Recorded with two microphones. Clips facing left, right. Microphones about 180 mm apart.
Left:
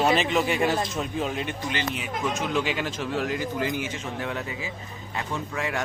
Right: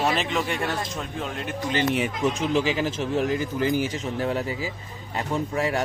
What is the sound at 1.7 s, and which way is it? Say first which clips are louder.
Speech: right 11 dB; 50° right (ahead or behind).